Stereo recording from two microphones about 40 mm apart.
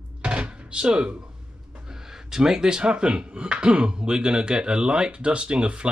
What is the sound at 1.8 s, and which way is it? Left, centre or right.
Speech, centre.